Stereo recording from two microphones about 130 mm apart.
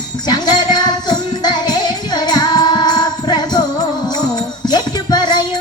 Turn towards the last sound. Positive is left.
turn(degrees=35)  # may be behind; listen again after turning